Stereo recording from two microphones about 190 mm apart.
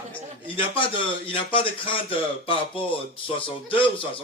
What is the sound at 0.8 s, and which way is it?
Speech, 30° left (ahead or behind).